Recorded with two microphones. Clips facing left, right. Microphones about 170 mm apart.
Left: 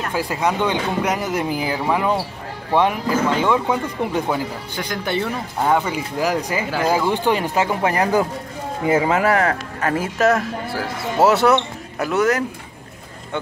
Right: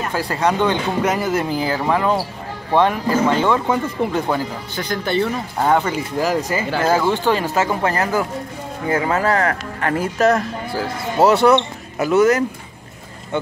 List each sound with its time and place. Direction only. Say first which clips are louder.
0.1 s speech: right 1 dB; 5° left (ahead or behind)
9.9 s speech: right 2 dB; 5° left (ahead or behind)